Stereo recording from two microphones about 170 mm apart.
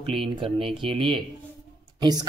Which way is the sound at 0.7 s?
30° right (ahead or behind).